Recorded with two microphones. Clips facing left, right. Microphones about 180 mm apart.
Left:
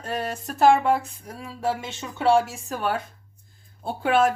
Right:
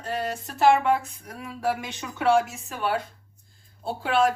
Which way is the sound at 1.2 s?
25° left (ahead or behind).